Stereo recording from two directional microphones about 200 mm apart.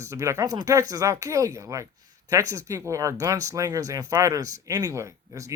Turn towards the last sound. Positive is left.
turn(degrees=-15)  # may be behind; listen again after turning